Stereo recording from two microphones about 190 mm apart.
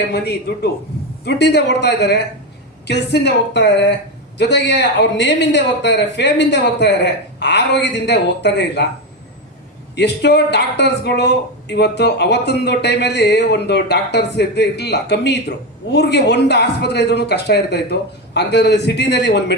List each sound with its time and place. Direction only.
0.1 s speech: 55° left (ahead or behind)
9.9 s speech: 60° left (ahead or behind)